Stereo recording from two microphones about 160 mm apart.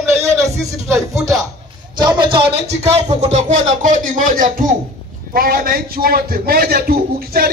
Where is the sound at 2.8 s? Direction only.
45° right (ahead or behind).